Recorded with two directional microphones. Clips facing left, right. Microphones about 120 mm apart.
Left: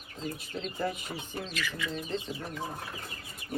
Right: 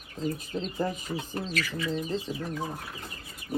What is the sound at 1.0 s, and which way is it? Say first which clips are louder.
Speech: right 5 dB; 40° right (ahead or behind).